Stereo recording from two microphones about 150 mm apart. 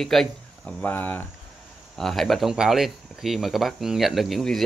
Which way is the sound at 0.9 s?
10° left (ahead or behind).